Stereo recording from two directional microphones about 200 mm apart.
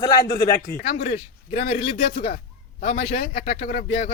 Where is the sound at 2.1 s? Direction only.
40° left (ahead or behind).